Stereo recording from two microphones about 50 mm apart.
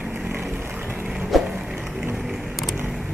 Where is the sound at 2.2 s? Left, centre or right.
Centre.